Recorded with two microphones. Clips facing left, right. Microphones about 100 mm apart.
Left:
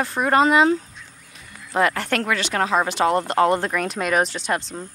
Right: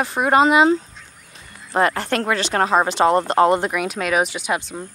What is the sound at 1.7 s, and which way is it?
Speech, 35° right (ahead or behind).